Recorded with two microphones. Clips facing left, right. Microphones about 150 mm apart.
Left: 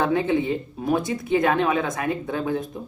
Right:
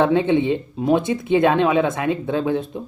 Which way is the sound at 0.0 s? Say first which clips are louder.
Right 5 dB; 25° right (ahead or behind).